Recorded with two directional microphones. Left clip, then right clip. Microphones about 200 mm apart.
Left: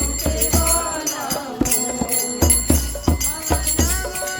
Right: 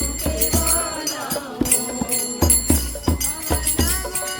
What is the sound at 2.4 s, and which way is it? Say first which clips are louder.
Music: even; 10° left (ahead or behind).